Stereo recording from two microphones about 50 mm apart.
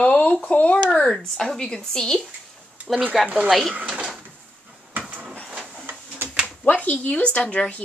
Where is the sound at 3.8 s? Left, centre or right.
Right.